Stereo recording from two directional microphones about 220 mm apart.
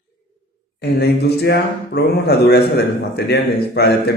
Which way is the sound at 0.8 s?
50° left (ahead or behind).